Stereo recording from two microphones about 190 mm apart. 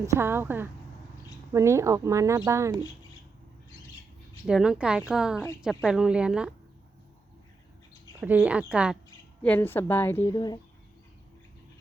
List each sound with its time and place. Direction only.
0.0 s speech: 15° right (ahead or behind)
4.4 s speech: 5° right (ahead or behind)
8.2 s speech: 5° right (ahead or behind)
9.4 s a woman's voice: 10° left (ahead or behind)